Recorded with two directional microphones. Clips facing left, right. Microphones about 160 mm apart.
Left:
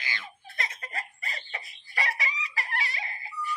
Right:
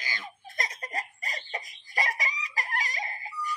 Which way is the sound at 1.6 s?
40° right (ahead or behind).